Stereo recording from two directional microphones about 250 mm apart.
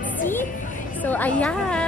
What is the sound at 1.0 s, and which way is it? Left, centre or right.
Speech, centre.